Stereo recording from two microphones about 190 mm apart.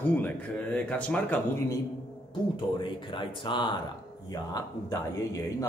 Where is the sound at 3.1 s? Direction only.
25° left (ahead or behind).